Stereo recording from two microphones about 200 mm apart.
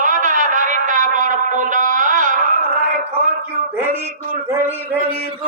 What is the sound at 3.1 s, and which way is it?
Speech, 40° right (ahead or behind).